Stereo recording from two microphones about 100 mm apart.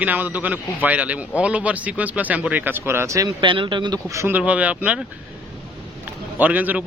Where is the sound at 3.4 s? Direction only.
55° right (ahead or behind).